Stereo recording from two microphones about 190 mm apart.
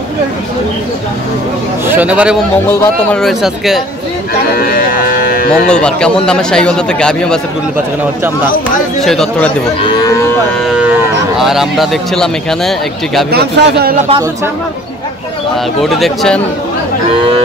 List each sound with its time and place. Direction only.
1.9 s speech: 10° right (ahead or behind)
2.7 s speech: 10° left (ahead or behind)
4.6 s a sound: 50° left (ahead or behind)
5.5 s speech: 5° left (ahead or behind)
9.0 s speech: centre (ahead or behind)
11.3 s speech: centre (ahead or behind)
13.3 s a man's voice: 60° right (ahead or behind)
15.8 s speech: centre (ahead or behind)